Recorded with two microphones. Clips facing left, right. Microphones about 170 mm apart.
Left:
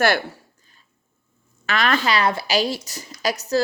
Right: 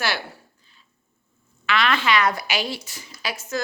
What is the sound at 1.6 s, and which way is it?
A woman's voice, 45° left (ahead or behind).